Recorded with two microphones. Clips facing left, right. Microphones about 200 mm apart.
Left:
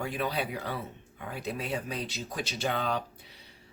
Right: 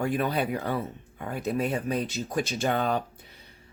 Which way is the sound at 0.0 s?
50° right (ahead or behind).